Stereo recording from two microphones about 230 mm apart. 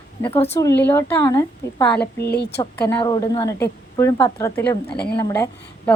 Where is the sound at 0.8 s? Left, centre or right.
Centre.